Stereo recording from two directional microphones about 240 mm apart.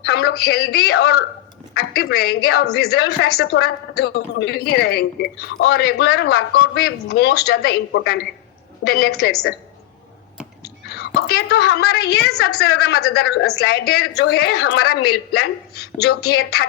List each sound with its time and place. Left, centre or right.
0.1 s a woman's voice: left
10.6 s a woman's voice: left